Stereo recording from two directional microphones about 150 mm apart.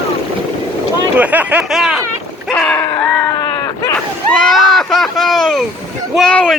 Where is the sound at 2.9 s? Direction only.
25° left (ahead or behind).